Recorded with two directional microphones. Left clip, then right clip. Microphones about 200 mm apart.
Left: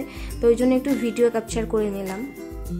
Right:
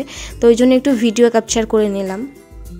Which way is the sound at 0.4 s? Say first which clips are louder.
Right 8 dB; 40° right (ahead or behind).